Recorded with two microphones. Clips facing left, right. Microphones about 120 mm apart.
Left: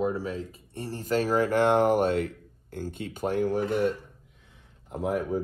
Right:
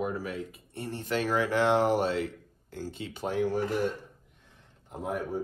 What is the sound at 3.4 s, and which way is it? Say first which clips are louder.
Speech: left 2 dB; centre (ahead or behind).